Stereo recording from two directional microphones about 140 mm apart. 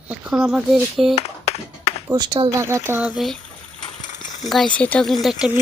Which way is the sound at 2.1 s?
30° right (ahead or behind).